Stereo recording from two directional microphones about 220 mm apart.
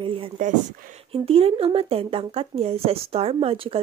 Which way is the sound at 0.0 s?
25° right (ahead or behind).